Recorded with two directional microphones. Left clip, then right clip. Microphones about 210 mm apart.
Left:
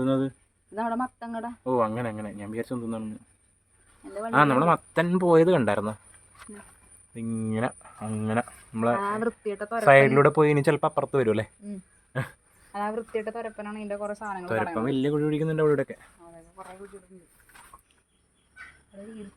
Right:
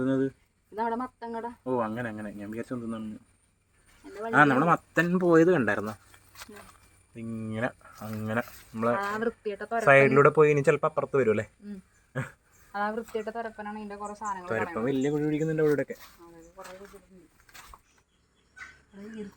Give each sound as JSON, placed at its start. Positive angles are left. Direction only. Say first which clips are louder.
{"t": 0.0, "sound": "speech", "louder": "left 2 dB", "side_deg": 20}
{"t": 4.2, "sound": "speech", "louder": "left 1 dB", "side_deg": 15}
{"t": 7.2, "sound": "speech", "louder": "left 3 dB", "side_deg": 20}
{"t": 9.8, "sound": "speech", "louder": "left 2 dB", "side_deg": 10}
{"t": 12.7, "sound": "speech", "louder": "left 1 dB", "side_deg": 35}
{"t": 14.5, "sound": "speech", "louder": "left 3 dB", "side_deg": 25}